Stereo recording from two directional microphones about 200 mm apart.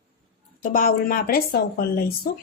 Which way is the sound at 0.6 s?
45° left (ahead or behind).